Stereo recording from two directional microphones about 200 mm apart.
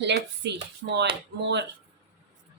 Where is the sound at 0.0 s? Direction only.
60° right (ahead or behind).